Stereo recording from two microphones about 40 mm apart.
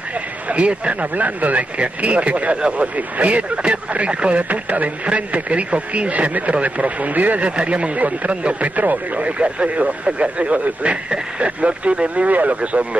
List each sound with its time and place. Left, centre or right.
0.5 s a man's voice: right
1.1 s a man's voice: right